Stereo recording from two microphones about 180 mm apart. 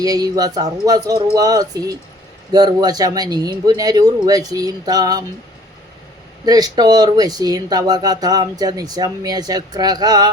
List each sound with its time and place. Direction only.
0.0 s speech: 20° right (ahead or behind)
6.4 s speech: 20° right (ahead or behind)